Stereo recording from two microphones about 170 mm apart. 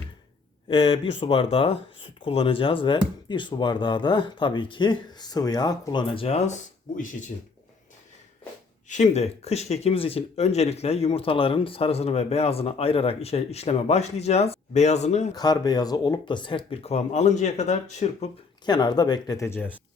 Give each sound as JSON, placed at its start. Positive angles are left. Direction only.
{"t": 0.7, "sound": "speech", "side_deg": 30}
{"t": 8.9, "sound": "speech", "side_deg": 40}
{"t": 15.4, "sound": "speech", "side_deg": 25}
{"t": 18.6, "sound": "speech", "side_deg": 25}